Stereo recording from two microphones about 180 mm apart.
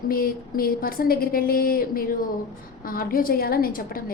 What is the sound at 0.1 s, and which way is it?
A woman's voice, 55° left (ahead or behind).